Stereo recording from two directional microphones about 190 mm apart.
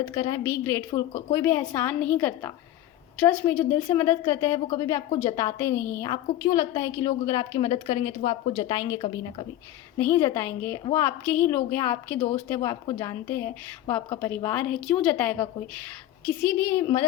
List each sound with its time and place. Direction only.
0.1 s a woman's voice: 25° left (ahead or behind)
8.5 s a woman's voice: 20° left (ahead or behind)
10.0 s a woman's voice: 10° left (ahead or behind)